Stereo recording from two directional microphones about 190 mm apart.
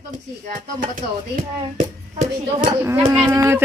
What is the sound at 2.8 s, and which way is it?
Speech, 15° right (ahead or behind).